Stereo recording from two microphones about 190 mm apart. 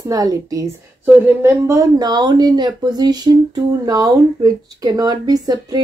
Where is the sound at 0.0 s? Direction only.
20° right (ahead or behind).